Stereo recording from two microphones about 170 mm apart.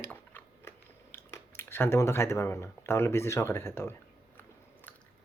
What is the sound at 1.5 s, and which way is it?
Speech, 10° left (ahead or behind).